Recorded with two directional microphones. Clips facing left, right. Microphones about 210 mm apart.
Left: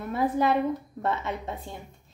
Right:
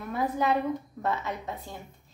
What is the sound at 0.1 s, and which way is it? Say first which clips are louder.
A woman's voice: left 3 dB; 30° left (ahead or behind).